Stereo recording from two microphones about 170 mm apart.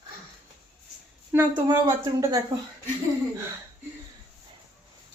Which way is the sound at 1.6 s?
20° right (ahead or behind).